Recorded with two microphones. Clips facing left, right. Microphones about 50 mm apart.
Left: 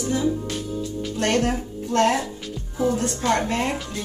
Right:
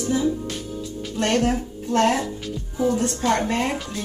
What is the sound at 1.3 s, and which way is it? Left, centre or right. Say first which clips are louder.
Speech: right 1 dB; centre.